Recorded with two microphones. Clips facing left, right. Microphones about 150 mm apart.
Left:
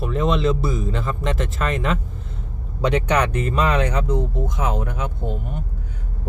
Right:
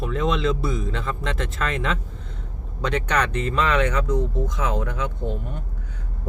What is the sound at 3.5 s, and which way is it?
Speech, 35° left (ahead or behind).